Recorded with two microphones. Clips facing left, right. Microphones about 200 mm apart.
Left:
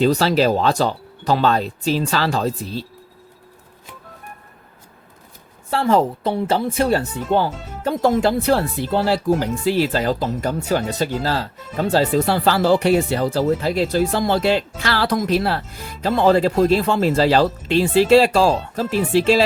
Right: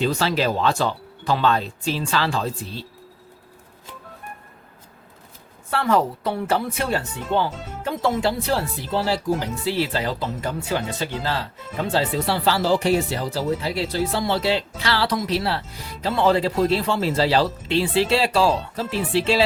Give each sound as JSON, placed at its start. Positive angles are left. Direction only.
{"t": 0.0, "sound": "speech", "side_deg": 40}
{"t": 5.7, "sound": "a woman's voice", "side_deg": 30}
{"t": 7.9, "sound": "speech", "side_deg": 45}